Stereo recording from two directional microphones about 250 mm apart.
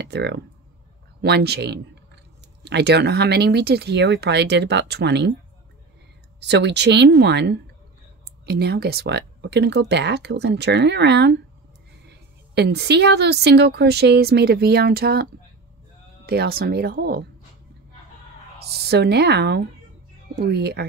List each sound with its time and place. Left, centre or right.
0.0 s a woman's voice: right
6.4 s a woman's voice: right
16.3 s a woman's voice: right
18.7 s a woman's voice: right